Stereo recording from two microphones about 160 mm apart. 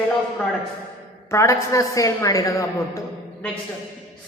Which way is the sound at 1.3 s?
20° left (ahead or behind).